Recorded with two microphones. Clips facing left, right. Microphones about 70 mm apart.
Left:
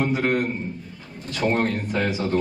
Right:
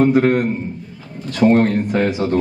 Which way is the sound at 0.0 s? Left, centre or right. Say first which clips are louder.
Right 8 dB; right.